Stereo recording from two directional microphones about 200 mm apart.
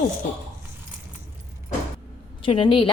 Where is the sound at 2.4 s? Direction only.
25° left (ahead or behind).